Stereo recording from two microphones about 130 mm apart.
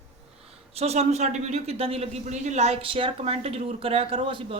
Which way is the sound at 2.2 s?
65° right (ahead or behind).